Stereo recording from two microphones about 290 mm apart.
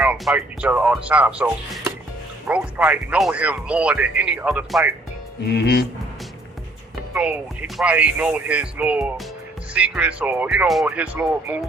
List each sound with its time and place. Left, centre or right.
0.0 s speech: centre
5.5 s speech: left
7.1 s speech: centre